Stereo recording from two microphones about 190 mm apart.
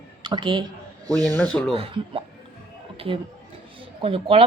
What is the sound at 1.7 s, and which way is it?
Speech, 30° right (ahead or behind).